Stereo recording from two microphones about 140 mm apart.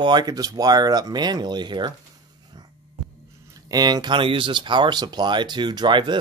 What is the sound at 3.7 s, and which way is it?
Speech, 30° right (ahead or behind).